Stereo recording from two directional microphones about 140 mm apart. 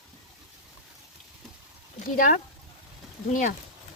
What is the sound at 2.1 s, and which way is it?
Speech, 80° left.